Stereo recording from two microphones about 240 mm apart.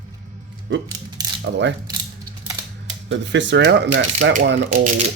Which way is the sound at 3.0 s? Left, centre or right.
Right.